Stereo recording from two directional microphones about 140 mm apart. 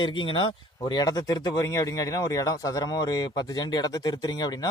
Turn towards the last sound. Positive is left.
turn(degrees=30)  # may be behind; listen again after turning